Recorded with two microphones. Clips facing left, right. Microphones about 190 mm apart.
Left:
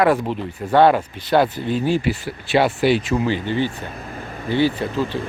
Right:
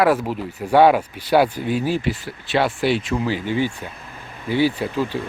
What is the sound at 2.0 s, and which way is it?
Speech, 5° left (ahead or behind).